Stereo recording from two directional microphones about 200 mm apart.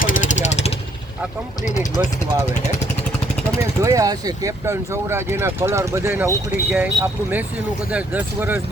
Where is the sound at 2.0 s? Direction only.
15° right (ahead or behind).